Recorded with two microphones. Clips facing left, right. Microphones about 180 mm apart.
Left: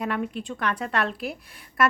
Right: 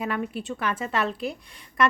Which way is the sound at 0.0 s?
5° right (ahead or behind).